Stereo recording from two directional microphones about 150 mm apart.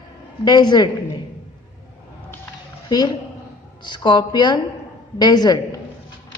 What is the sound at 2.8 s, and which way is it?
A woman's voice, 30° left (ahead or behind).